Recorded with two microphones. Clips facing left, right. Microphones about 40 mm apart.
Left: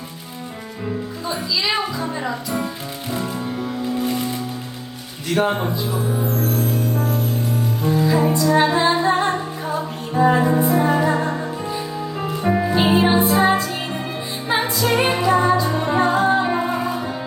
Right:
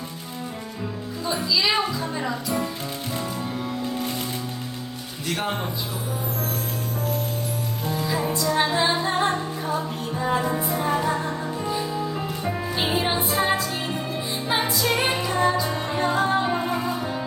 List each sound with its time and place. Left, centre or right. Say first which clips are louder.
1.3 s speech: even; centre
5.3 s speech: left 8 dB; centre
8.0 s music: left 6 dB; centre
10.2 s music: left 9 dB; centre
11.7 s music: even; centre
12.2 s music: left 8 dB; left
12.7 s music: left 7 dB; centre